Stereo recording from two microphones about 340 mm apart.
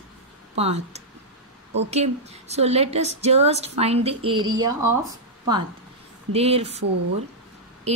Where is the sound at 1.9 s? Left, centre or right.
Centre.